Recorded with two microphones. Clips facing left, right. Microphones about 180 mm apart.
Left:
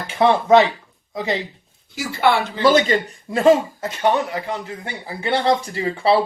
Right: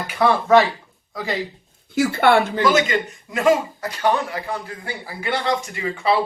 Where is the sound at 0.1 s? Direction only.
20° left (ahead or behind).